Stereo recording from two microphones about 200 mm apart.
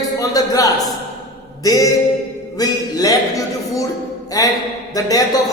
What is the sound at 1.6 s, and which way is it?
Speech, 20° left (ahead or behind).